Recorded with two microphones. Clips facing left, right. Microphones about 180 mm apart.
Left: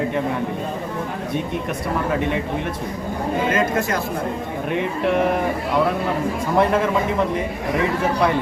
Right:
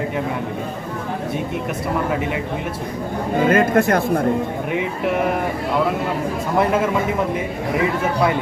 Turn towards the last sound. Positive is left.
turn(degrees=-5)  # may be behind; listen again after turning